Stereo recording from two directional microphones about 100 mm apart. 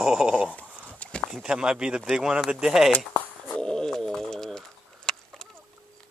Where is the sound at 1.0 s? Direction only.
10° left (ahead or behind).